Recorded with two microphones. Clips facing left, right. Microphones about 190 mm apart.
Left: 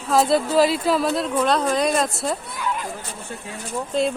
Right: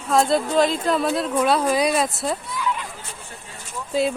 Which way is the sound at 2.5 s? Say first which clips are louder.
Right 1 dB; 55° left (ahead or behind).